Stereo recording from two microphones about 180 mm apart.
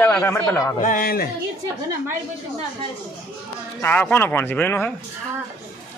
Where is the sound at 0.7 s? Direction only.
50° left (ahead or behind).